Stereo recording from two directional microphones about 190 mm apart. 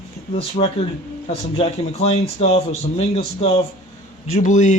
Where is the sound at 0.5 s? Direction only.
30° left (ahead or behind).